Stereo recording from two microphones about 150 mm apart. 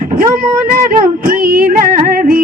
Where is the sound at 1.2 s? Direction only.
70° right (ahead or behind).